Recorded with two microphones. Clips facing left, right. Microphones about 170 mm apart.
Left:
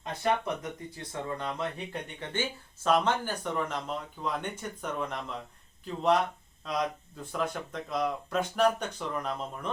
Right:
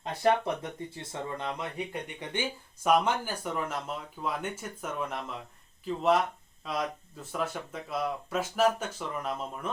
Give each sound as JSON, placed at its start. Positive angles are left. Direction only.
{"t": 0.2, "sound": "speech", "side_deg": -30}